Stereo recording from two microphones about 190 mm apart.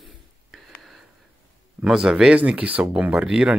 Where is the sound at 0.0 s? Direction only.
Centre (ahead or behind).